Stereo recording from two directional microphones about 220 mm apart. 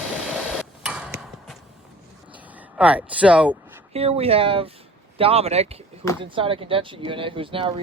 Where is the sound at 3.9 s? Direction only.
25° right (ahead or behind).